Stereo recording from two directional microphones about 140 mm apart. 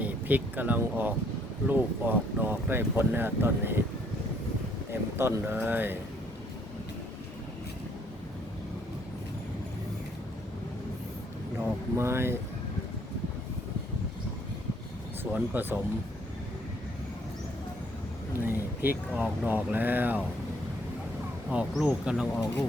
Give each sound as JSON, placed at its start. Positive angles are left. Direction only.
{"t": 0.0, "sound": "speech", "side_deg": -10}
{"t": 4.9, "sound": "speech", "side_deg": -15}
{"t": 11.9, "sound": "speech", "side_deg": -20}
{"t": 15.2, "sound": "speech", "side_deg": -15}
{"t": 18.3, "sound": "speech", "side_deg": -15}
{"t": 21.5, "sound": "speech", "side_deg": -10}